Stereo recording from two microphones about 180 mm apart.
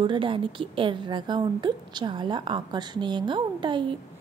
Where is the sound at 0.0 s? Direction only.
25° right (ahead or behind).